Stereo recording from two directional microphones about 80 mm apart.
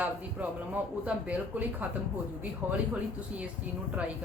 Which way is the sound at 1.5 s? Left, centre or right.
Centre.